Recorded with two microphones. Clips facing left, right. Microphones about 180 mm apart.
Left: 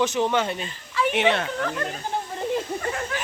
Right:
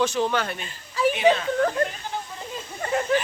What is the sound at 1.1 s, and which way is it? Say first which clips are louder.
Speech: right 1 dB; 75° left (ahead or behind).